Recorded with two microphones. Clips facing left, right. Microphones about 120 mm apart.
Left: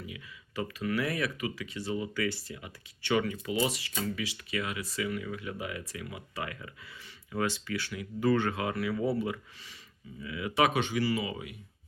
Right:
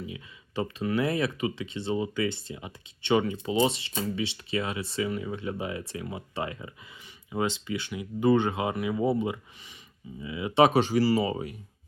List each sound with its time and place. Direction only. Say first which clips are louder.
0.0 s speech: right 5 dB; 25° right (ahead or behind)